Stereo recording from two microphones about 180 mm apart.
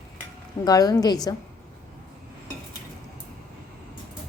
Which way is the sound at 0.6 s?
20° left (ahead or behind).